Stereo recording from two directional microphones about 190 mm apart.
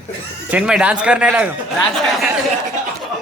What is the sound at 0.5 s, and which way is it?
Speech, 5° right (ahead or behind).